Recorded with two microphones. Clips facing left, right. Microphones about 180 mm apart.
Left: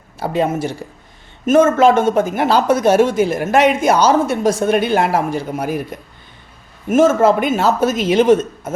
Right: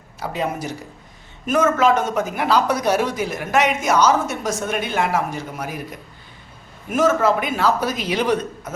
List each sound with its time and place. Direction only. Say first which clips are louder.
0.2 s speech: left 7 dB; 30° left (ahead or behind)
6.9 s speech: left 6 dB; 25° left (ahead or behind)